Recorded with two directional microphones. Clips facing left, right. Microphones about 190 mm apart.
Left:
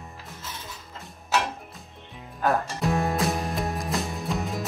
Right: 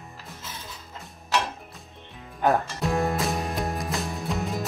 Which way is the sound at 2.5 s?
Centre (ahead or behind).